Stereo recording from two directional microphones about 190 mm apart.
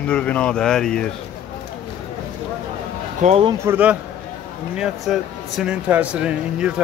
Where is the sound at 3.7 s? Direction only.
10° right (ahead or behind).